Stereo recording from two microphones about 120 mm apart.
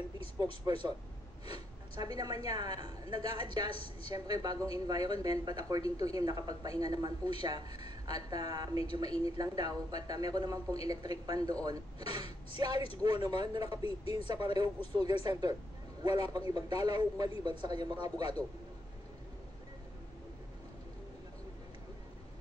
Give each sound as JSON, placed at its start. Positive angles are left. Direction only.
{"t": 0.7, "sound": "speech", "side_deg": -30}
{"t": 2.0, "sound": "speech", "side_deg": -30}
{"t": 3.7, "sound": "a woman's voice", "side_deg": 50}
{"t": 4.1, "sound": "speech", "side_deg": -35}
{"t": 13.8, "sound": "a woman's voice", "side_deg": 50}
{"t": 14.2, "sound": "speech", "side_deg": -35}